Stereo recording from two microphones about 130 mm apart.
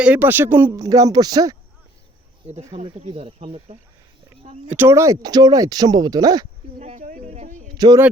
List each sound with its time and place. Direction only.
0.0 s speech: 15° right (ahead or behind); by 1.5 s 30° right (ahead or behind)
2.7 s speech: 45° right (ahead or behind)
4.7 s speech: 20° right (ahead or behind)
6.8 s speech: 80° right
7.8 s speech: 30° right (ahead or behind)